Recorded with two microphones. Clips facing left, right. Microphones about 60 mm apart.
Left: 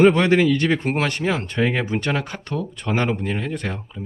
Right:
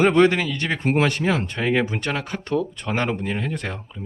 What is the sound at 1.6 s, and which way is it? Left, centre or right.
Speech, centre.